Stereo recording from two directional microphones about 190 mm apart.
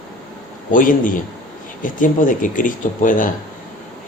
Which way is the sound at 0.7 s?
45° left (ahead or behind).